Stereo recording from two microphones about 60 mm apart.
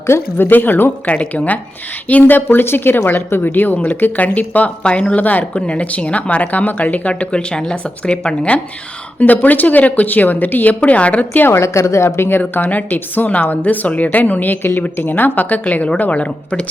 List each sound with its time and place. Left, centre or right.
0.1 s speech: left
1.0 s a woman's voice: left
9.1 s a woman's voice: left
11.4 s speech: left
12.4 s a woman's voice: left